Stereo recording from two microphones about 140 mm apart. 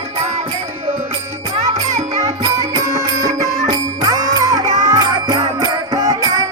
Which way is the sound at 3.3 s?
55° right (ahead or behind).